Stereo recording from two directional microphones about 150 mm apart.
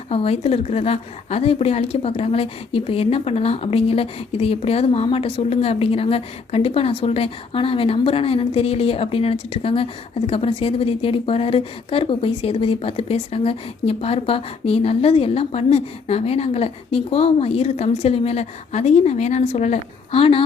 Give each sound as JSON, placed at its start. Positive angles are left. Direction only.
{"t": 0.1, "sound": "a woman's voice", "side_deg": 40}